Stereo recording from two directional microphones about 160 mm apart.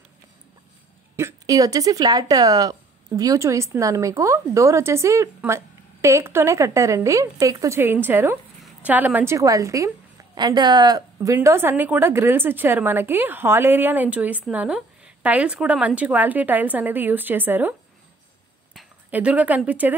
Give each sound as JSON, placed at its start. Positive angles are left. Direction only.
{"t": 1.1, "sound": "a woman's voice", "side_deg": -20}
{"t": 19.0, "sound": "a woman's voice", "side_deg": -10}